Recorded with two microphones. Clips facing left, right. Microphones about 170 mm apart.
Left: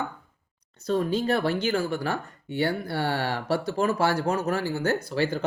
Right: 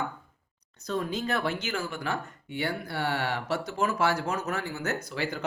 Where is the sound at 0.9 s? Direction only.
30° left (ahead or behind).